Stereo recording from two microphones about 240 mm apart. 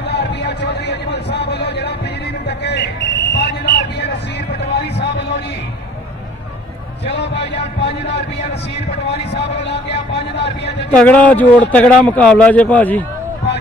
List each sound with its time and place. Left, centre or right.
0.1 s a sound: left
7.2 s music: left
9.1 s music: left
10.9 s a man's voice: centre